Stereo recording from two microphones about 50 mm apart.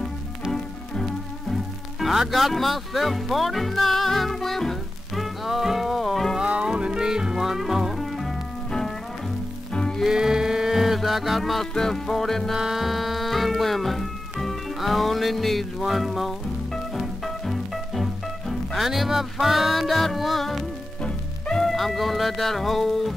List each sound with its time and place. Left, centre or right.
0.5 s music: centre
6.4 s music: right; by 8.4 s centre
9.7 s music: centre
10.0 s music: centre
11.7 s speech: centre
12.5 s music: centre
21.0 s music: centre
21.6 s speech: centre